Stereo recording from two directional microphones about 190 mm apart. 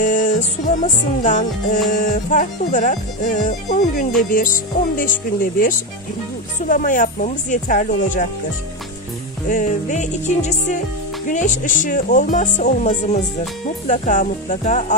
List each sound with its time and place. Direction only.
0.0 s music: 40° left (ahead or behind)
9.5 s speech: 40° left (ahead or behind)